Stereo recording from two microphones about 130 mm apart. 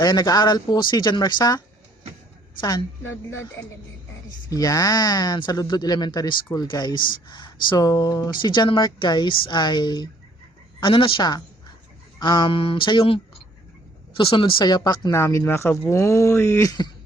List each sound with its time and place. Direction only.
0.0 s speech: 30° left (ahead or behind)
14.2 s speech: 45° left (ahead or behind)